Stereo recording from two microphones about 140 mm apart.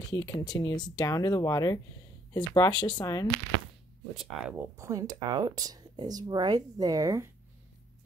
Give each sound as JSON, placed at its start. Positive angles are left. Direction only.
{"t": 0.1, "sound": "speech", "side_deg": 30}
{"t": 4.1, "sound": "speech", "side_deg": 0}
{"t": 4.7, "sound": "speech", "side_deg": -25}